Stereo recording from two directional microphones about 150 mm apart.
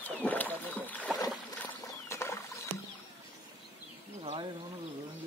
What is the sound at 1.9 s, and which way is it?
Rodents, 20° left (ahead or behind).